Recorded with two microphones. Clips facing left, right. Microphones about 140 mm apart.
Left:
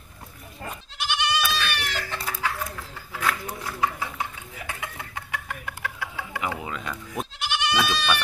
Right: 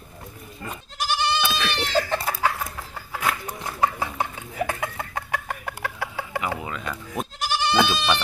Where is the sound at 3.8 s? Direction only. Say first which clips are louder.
Right 4 dB; 40° right (ahead or behind).